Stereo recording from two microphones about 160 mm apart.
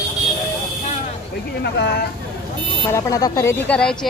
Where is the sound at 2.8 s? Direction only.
20° left (ahead or behind).